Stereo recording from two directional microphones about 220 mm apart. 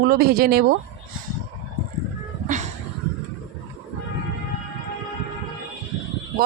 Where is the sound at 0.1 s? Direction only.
45° right (ahead or behind).